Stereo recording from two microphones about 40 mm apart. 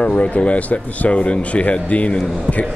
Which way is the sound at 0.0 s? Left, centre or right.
Left.